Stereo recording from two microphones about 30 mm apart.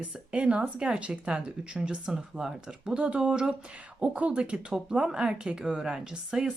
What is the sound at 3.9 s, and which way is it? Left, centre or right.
Speech, right.